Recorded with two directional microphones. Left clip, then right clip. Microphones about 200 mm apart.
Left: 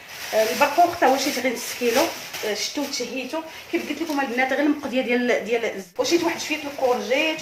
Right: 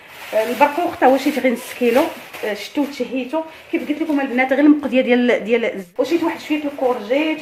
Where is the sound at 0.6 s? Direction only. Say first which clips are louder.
Right 2 dB; 40° right (ahead or behind).